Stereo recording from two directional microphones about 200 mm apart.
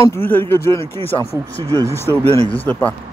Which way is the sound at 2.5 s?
10° left (ahead or behind).